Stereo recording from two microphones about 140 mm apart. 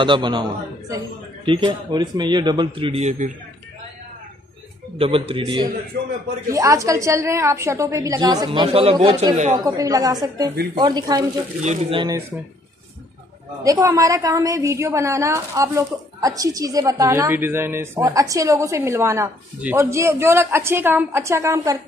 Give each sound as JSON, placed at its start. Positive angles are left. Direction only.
{"t": 0.0, "sound": "speech", "side_deg": -35}
{"t": 4.9, "sound": "speech", "side_deg": -40}
{"t": 6.5, "sound": "a woman's voice", "side_deg": -25}
{"t": 8.5, "sound": "speech", "side_deg": -40}
{"t": 9.3, "sound": "speech", "side_deg": -55}
{"t": 9.7, "sound": "a woman's voice", "side_deg": -25}
{"t": 11.6, "sound": "speech", "side_deg": -55}
{"t": 13.7, "sound": "a woman's voice", "side_deg": -25}